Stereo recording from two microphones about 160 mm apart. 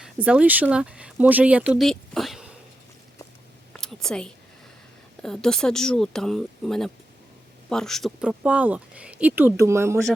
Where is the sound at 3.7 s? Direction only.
5° left (ahead or behind).